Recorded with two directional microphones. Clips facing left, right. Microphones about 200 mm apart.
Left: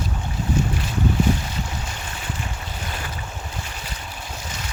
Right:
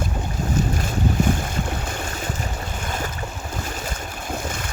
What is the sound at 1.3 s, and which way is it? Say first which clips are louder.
Boat: even; 50° right (ahead or behind).